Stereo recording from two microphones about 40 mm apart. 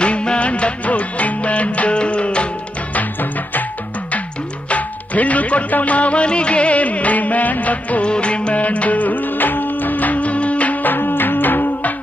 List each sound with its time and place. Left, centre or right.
0.0 s music: left
4.6 s music: left